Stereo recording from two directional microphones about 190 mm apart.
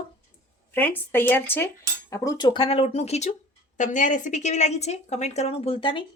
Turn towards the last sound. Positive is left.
turn(degrees=30)  # may be behind; listen again after turning